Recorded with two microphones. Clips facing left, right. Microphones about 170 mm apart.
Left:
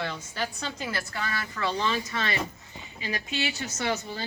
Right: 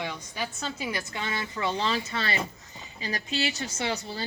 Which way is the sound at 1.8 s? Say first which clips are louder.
Even; 30° right (ahead or behind).